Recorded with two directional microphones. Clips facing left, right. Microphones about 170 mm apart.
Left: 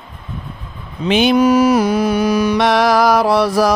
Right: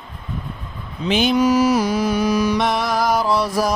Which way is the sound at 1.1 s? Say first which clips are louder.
Left 4 dB; 70° left (ahead or behind).